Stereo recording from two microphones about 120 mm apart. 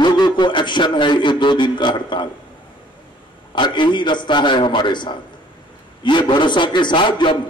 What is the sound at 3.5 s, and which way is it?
Speech, 40° left (ahead or behind).